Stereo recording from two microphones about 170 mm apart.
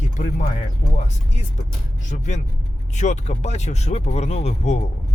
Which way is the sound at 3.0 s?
45° left (ahead or behind).